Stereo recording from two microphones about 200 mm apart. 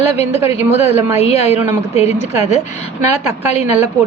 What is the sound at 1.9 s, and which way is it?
Speech, 35° left (ahead or behind).